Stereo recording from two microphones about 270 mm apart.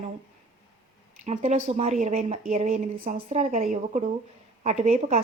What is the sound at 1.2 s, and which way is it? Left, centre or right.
A woman's voice, right.